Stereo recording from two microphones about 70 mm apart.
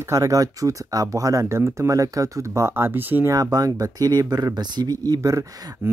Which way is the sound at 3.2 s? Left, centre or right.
Right.